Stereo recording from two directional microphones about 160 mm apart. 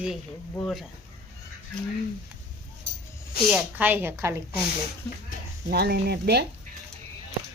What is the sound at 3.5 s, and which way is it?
Speech, 10° right (ahead or behind).